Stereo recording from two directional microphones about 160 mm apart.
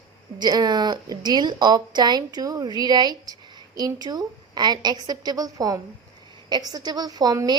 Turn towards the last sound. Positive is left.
turn(degrees=-25)  # may be behind; listen again after turning